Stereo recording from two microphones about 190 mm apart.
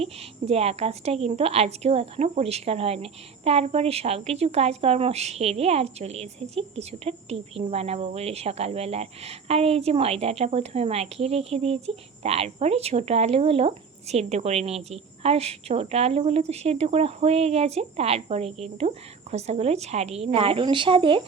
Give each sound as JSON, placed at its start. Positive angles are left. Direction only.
{"t": 0.0, "sound": "a woman's voice", "side_deg": -30}